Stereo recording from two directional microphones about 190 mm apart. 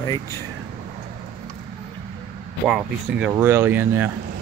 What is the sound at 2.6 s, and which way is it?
Speech, 5° right (ahead or behind).